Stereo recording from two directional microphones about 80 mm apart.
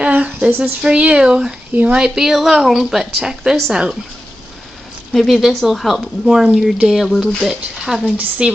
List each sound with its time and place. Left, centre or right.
0.0 s speech: right
5.1 s speech: centre